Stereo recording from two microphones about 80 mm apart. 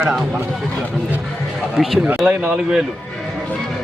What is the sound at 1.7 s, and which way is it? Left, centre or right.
A man's voice, centre.